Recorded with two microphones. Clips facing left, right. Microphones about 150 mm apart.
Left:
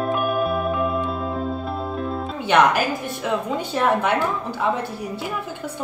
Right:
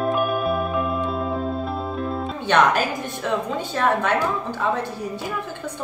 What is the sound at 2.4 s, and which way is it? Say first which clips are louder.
A woman's voice: left 1 dB; 10° left (ahead or behind).